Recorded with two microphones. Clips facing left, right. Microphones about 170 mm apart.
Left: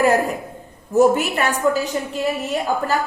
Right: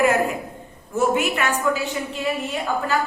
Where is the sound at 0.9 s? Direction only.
40° left (ahead or behind).